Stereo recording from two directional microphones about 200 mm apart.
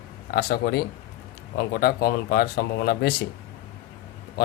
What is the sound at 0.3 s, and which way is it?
Speech, 50° left (ahead or behind).